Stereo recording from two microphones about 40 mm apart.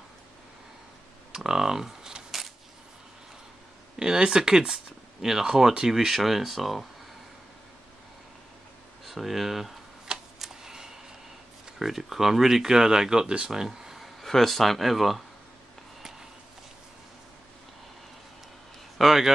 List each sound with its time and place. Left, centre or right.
1.3 s camera: centre
4.0 s speech: right; by 6.9 s centre
9.0 s speech: centre
10.1 s a sound: right
10.4 s a sound: centre
11.8 s speech: centre
13.5 s a sound: centre
14.2 s speech: centre
18.9 s speech: centre